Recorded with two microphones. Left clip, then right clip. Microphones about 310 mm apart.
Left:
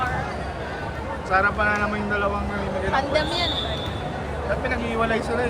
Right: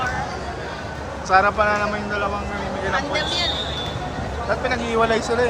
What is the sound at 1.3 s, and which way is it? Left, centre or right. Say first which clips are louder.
Speech: right 4 dB; centre.